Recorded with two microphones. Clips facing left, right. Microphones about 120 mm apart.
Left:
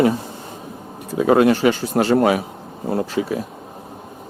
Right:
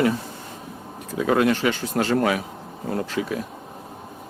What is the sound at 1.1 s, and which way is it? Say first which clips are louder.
Speech: left 5 dB; 35° left (ahead or behind).